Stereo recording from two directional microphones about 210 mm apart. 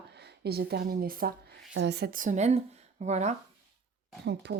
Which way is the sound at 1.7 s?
55° right (ahead or behind).